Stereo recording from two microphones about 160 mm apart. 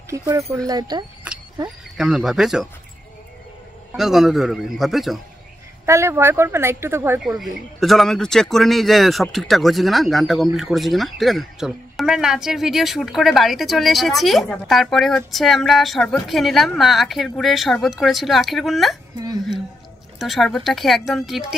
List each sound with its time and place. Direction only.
0.1 s speech: 20° right (ahead or behind)
2.0 s speech: 5° right (ahead or behind)
3.9 s speech: centre (ahead or behind)
5.9 s speech: 15° right (ahead or behind)
7.2 s speech: centre (ahead or behind)
20.2 s speech: centre (ahead or behind)